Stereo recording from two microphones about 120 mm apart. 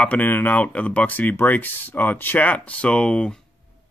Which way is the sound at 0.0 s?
15° left (ahead or behind).